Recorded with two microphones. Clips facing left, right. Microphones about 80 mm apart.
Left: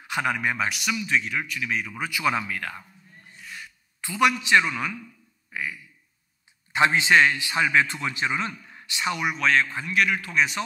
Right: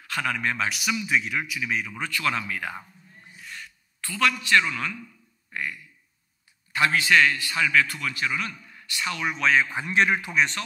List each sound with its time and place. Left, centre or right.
0.0 s a man's voice: centre
0.7 s speech: centre
3.3 s a sound: centre
3.6 s a man's voice: centre
5.5 s a sound: centre
6.7 s a man's voice: left
9.3 s speech: centre
9.7 s a man's voice: right